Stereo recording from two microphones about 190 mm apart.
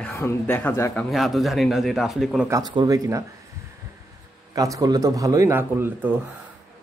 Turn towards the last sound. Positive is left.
turn(degrees=-10)  # may be behind; listen again after turning